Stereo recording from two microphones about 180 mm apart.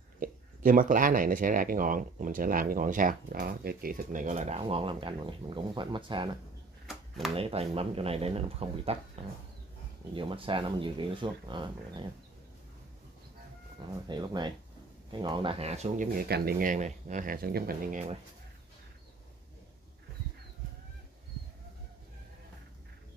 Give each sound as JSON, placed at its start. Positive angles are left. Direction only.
{"t": 0.2, "sound": "speech", "side_deg": -50}
{"t": 6.9, "sound": "a sound", "side_deg": 0}
{"t": 7.3, "sound": "speech", "side_deg": -35}
{"t": 14.0, "sound": "speech", "side_deg": -25}
{"t": 16.2, "sound": "speech", "side_deg": -60}